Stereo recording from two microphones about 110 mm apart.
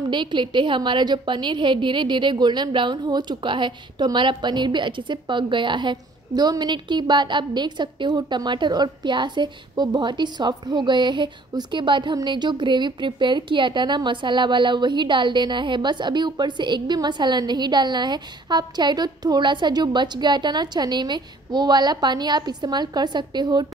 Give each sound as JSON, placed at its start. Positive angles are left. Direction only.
{"t": 0.1, "sound": "a woman's voice", "side_deg": -45}